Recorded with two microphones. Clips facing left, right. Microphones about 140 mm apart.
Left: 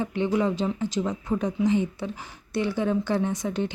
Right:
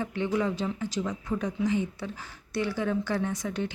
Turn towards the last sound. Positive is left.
turn(degrees=25)  # may be behind; listen again after turning